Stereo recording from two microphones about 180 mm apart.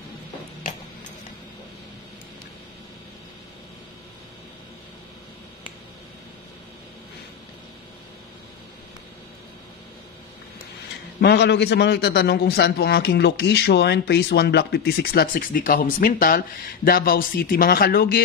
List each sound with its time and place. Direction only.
11.1 s a man's voice: 70° left (ahead or behind)